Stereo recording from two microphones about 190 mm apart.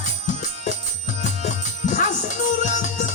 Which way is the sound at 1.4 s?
40° left (ahead or behind).